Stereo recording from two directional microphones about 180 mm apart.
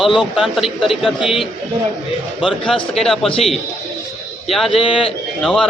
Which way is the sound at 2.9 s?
Centre (ahead or behind).